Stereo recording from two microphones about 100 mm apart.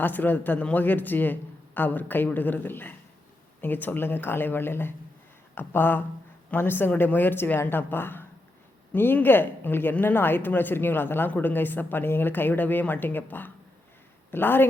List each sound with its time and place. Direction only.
0.0 s speech: 20° left (ahead or behind)